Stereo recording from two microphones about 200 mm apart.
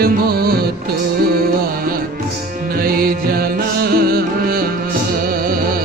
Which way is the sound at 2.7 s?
45° right (ahead or behind).